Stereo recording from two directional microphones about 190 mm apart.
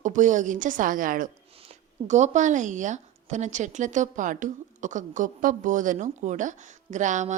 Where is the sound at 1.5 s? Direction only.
35° right (ahead or behind).